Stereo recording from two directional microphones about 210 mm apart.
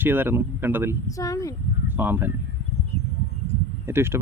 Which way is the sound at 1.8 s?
10° right (ahead or behind).